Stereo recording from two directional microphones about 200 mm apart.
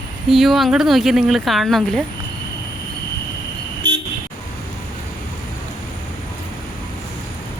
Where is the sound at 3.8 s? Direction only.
25° right (ahead or behind).